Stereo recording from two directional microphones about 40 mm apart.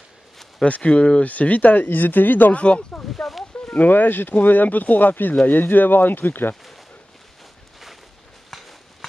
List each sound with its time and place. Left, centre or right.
0.7 s speech: left
1.2 s speech: left
2.5 s speech: left
3.7 s speech: left